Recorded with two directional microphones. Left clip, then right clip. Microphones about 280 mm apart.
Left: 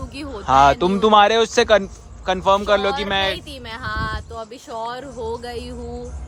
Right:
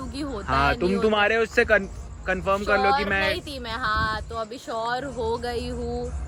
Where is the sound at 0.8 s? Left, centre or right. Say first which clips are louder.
Left 8 dB; left; by 6.0 s centre.